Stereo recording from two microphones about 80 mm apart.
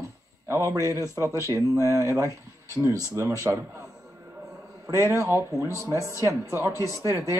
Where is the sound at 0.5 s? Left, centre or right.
Right.